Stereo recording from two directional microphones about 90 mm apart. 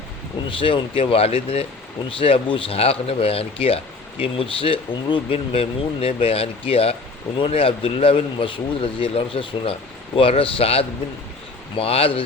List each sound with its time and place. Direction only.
0.4 s speech: 75° left (ahead or behind); by 6.9 s 90° left
7.3 s speech: 80° left
10.2 s speech: 90° left